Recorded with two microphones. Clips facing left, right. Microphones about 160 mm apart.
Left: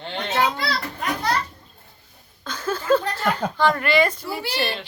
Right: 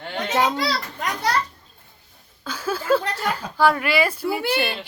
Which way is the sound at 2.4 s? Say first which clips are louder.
Even; 10° right (ahead or behind).